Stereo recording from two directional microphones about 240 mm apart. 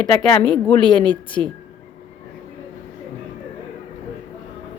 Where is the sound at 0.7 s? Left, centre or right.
Centre.